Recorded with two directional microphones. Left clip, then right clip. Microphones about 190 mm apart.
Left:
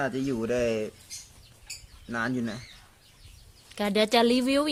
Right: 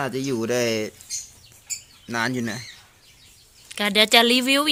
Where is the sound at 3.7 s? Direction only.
5° left (ahead or behind).